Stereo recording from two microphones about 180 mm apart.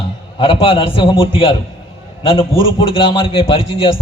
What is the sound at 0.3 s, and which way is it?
A man's voice, 30° left (ahead or behind).